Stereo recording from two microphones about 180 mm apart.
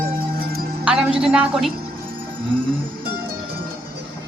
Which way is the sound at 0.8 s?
5° right (ahead or behind).